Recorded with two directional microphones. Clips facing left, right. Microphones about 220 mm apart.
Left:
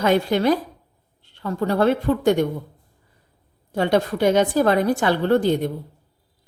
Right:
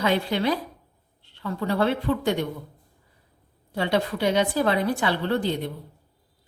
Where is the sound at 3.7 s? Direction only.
45° left (ahead or behind).